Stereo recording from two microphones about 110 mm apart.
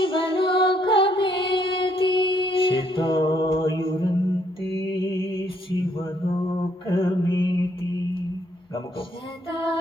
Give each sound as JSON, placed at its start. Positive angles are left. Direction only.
{"t": 0.0, "sound": "music", "side_deg": 55}
{"t": 4.8, "sound": "mantra", "side_deg": 45}